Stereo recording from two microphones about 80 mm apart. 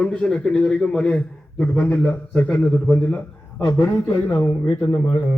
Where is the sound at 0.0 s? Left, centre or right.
Centre.